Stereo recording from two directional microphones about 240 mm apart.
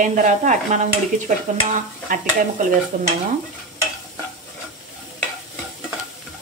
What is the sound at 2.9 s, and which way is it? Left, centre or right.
Stir, right.